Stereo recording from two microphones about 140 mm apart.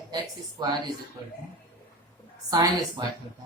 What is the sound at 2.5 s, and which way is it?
Speech, 25° right (ahead or behind).